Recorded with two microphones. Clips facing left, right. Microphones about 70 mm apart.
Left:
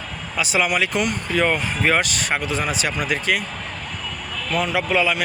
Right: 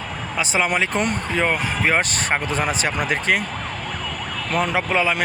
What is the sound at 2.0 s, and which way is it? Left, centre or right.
Speech, right.